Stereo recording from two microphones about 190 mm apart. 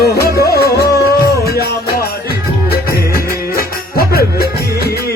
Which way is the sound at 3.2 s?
50° left (ahead or behind).